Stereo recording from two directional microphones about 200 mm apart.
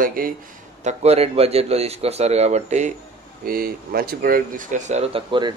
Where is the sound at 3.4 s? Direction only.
45° right (ahead or behind); by 5.5 s 25° right (ahead or behind).